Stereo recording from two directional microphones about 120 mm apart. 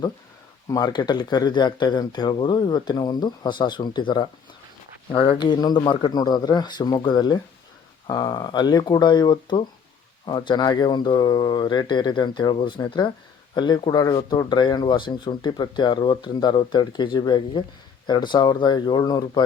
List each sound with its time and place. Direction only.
0.7 s speech: 35° left (ahead or behind)